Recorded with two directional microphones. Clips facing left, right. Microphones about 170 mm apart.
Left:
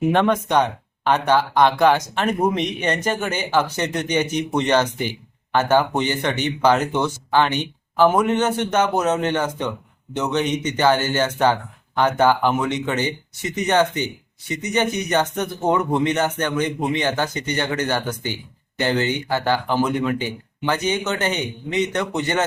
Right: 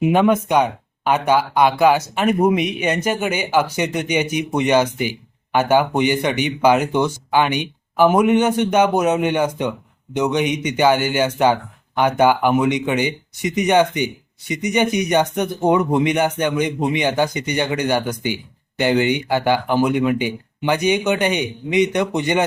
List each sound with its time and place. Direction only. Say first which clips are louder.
0.0 s speech: right 3 dB; 10° right (ahead or behind)